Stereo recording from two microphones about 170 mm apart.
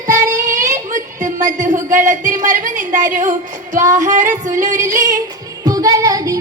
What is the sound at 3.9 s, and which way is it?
Female singing, 50° right (ahead or behind).